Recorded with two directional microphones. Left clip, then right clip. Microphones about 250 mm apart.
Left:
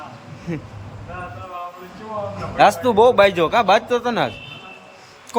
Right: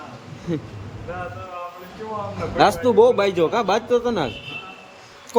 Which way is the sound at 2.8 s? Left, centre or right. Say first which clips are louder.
Left 2 dB; centre.